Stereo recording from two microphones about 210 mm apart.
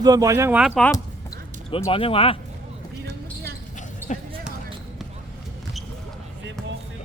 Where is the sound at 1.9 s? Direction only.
25° left (ahead or behind).